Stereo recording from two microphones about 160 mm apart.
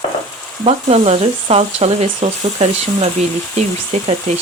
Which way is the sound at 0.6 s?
40° right (ahead or behind).